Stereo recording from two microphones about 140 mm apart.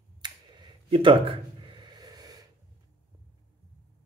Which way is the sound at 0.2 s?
35° right (ahead or behind).